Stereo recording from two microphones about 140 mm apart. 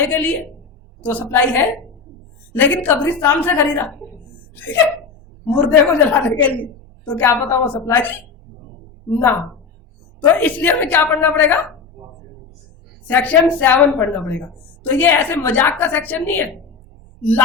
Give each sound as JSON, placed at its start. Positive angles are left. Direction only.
{"t": 0.0, "sound": "a woman's voice", "side_deg": 15}
{"t": 10.2, "sound": "a woman's voice", "side_deg": 10}
{"t": 13.1, "sound": "a woman's voice", "side_deg": 10}